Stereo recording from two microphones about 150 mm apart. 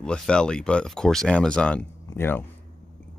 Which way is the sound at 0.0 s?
5° left (ahead or behind).